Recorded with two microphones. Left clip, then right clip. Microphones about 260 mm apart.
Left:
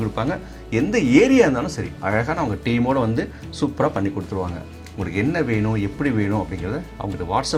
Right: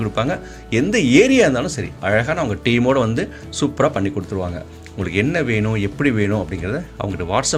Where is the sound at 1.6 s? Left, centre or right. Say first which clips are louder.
Right 4 dB; right.